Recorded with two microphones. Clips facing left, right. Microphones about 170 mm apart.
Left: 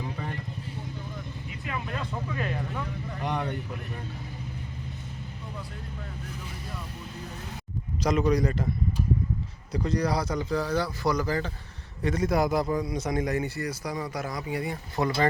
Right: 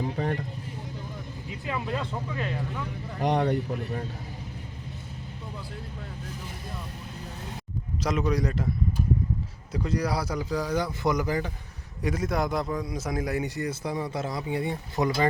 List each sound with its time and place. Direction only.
1.5 s speech: 20° right (ahead or behind)
3.2 s speech: 40° right (ahead or behind)
8.0 s a man's voice: centre (ahead or behind)
9.7 s a man's voice: 5° right (ahead or behind)
10.7 s speech: 20° right (ahead or behind)
12.0 s a man's voice: 5° right (ahead or behind)
13.4 s speech: 20° right (ahead or behind)